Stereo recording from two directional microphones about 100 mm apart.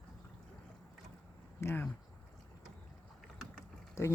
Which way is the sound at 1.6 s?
20° left (ahead or behind).